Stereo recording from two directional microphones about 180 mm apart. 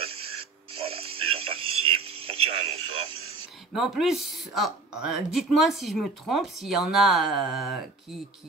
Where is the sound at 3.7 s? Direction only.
Centre (ahead or behind).